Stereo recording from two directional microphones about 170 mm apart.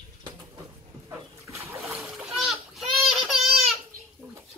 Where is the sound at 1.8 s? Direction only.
5° right (ahead or behind).